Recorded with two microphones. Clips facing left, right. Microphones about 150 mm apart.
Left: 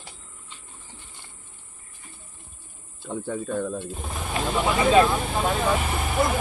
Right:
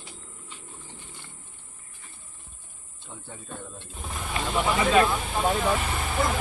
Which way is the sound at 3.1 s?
70° left (ahead or behind).